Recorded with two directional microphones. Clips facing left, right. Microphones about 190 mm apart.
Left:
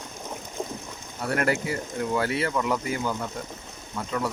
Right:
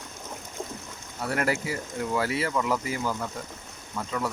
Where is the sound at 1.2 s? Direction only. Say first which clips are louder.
Left 2 dB; centre (ahead or behind).